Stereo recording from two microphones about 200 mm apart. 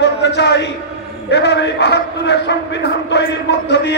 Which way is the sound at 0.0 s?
60° left (ahead or behind).